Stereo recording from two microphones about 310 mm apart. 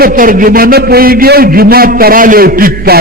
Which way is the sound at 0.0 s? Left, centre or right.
Right.